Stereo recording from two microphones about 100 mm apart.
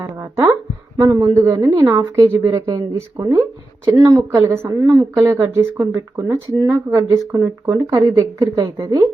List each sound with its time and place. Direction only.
0.0 s speech: 30° right (ahead or behind)
4.8 s speech: 40° right (ahead or behind)